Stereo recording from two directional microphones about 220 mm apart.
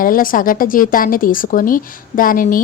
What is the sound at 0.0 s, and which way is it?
A woman's voice, 40° left (ahead or behind).